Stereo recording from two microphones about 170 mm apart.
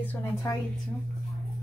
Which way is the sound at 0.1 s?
20° left (ahead or behind).